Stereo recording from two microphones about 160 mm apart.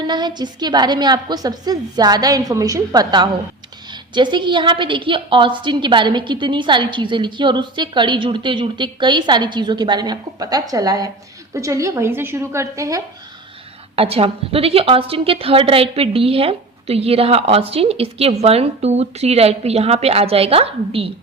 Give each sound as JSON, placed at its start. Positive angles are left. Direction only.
{"t": 0.1, "sound": "a woman's voice", "side_deg": -25}
{"t": 13.9, "sound": "a woman's voice", "side_deg": -35}